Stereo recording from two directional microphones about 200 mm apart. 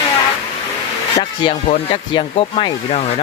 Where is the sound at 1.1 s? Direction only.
30° left (ahead or behind).